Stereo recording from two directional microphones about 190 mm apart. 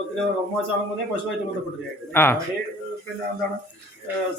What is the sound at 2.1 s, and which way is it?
Speech, 10° left (ahead or behind).